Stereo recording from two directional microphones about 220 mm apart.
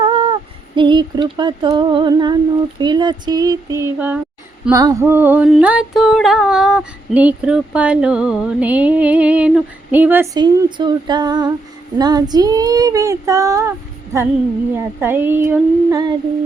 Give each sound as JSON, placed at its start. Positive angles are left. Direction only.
{"t": 0.0, "sound": "female singing", "side_deg": -25}
{"t": 0.8, "sound": "humming", "side_deg": -20}
{"t": 4.7, "sound": "a sound", "side_deg": -15}
{"t": 11.9, "sound": "child singing", "side_deg": -15}